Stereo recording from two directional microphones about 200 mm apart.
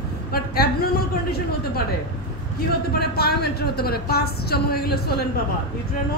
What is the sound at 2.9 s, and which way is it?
A woman's voice, 50° left (ahead or behind).